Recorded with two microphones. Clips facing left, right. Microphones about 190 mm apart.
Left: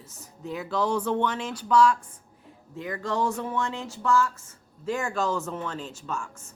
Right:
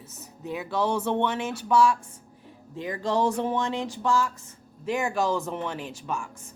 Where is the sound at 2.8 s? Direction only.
15° right (ahead or behind).